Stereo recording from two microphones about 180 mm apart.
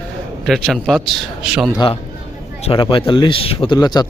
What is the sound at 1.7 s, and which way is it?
Speech, 25° left (ahead or behind).